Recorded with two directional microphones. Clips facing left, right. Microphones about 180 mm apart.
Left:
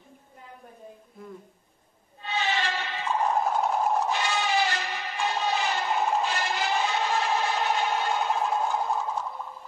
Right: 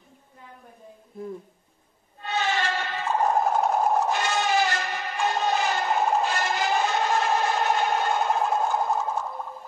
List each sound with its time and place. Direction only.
2.2 s music: 45° right (ahead or behind)